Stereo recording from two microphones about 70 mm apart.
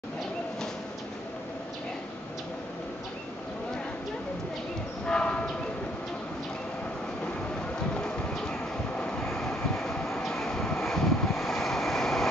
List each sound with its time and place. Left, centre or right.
5.0 s a sound: centre
7.9 s clip-clop: centre
9.0 s vehicle: centre
9.4 s vehicle: centre